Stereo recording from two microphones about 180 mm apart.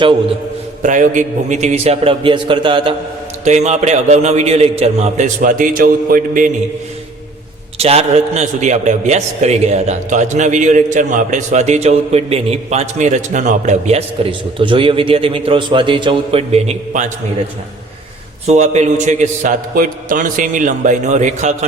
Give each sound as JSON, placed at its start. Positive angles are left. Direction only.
{"t": 0.8, "sound": "a man's voice", "side_deg": -45}
{"t": 3.4, "sound": "a man's voice", "side_deg": -40}
{"t": 7.8, "sound": "a man's voice", "side_deg": -35}
{"t": 18.4, "sound": "a man's voice", "side_deg": -40}